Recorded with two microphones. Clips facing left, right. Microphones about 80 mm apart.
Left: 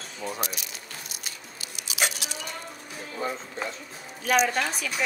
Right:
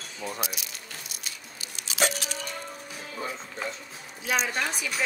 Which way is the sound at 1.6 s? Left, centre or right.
Right.